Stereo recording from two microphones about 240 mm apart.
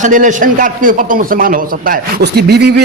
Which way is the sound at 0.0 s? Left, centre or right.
Right.